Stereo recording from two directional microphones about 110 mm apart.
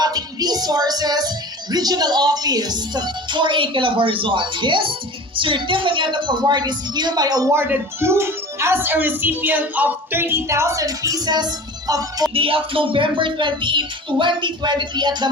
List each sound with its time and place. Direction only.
0.0 s music: 35° right (ahead or behind)
1.7 s a woman's voice: 35° right (ahead or behind)
7.5 s speech: 20° right (ahead or behind)
11.1 s music: 40° right (ahead or behind)
12.3 s a woman's voice: 55° right (ahead or behind); by 15.3 s 40° right (ahead or behind)